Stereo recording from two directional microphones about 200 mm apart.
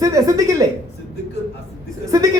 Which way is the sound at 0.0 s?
15° right (ahead or behind).